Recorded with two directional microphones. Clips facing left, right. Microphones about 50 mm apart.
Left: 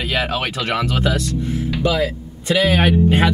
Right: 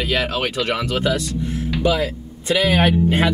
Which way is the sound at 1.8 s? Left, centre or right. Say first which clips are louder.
Even; centre.